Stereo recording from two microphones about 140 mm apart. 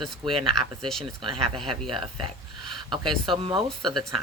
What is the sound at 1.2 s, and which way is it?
Speech, 35° right (ahead or behind).